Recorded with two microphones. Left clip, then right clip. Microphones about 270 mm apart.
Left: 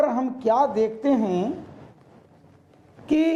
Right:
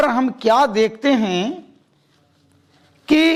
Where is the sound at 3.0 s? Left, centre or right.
Right.